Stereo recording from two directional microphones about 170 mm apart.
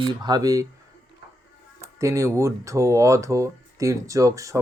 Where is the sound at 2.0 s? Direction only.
15° right (ahead or behind).